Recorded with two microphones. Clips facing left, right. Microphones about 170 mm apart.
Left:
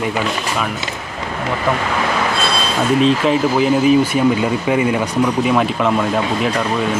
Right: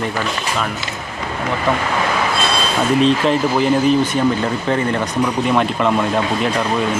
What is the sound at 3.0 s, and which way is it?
Speech, 5° left (ahead or behind).